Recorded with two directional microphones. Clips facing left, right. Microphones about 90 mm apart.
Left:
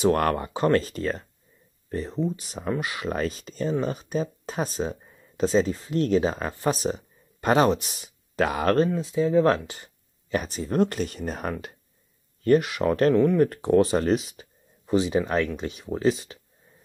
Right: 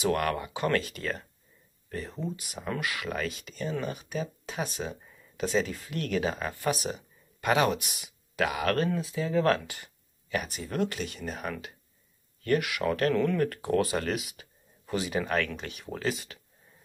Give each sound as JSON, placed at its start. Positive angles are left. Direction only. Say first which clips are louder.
{"t": 0.0, "sound": "speech", "louder": "left 6 dB", "side_deg": 35}
{"t": 8.7, "sound": "speech", "louder": "left 6 dB", "side_deg": 25}